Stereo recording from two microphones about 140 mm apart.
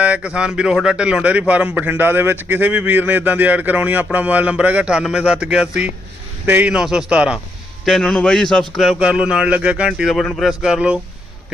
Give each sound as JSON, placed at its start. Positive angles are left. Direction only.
{"t": 0.0, "sound": "a man's voice", "side_deg": -10}